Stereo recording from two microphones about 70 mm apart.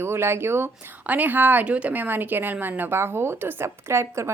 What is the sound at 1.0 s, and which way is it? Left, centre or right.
A woman's voice, right.